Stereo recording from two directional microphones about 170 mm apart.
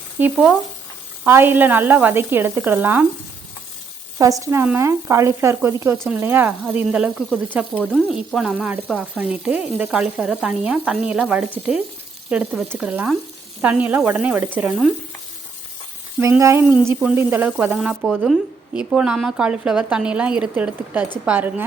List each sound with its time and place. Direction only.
0.2 s speech: 10° right (ahead or behind)
4.2 s speech: 20° right (ahead or behind)
12.8 s frying: 5° right (ahead or behind)
13.6 s speech: 10° right (ahead or behind)
16.4 s speech: 15° right (ahead or behind)